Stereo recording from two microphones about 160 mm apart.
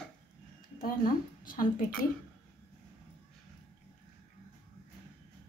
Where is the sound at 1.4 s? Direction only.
60° left (ahead or behind).